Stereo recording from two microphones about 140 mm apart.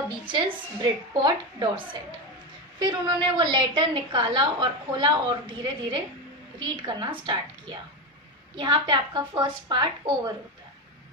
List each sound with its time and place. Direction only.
0.2 s a woman's voice: 30° right (ahead or behind)